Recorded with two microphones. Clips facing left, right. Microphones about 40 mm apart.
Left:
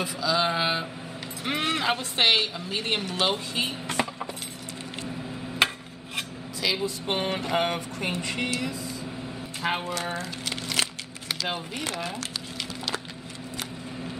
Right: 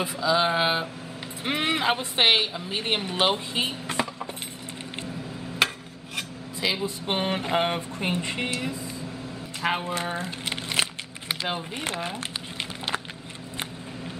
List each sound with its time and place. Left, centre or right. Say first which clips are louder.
0.0 s a woman's voice: right 2 dB; right
5.6 s a sound: even; centre
6.6 s speech: even; centre
8.1 s a woman's voice: right 1 dB; right
9.6 s speech: right 2 dB; centre
10.1 s a sound: right 1 dB; right
11.7 s a woman's voice: right 1 dB; right